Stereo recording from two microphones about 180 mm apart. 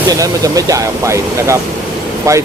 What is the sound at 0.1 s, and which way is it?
Speech, 20° right (ahead or behind).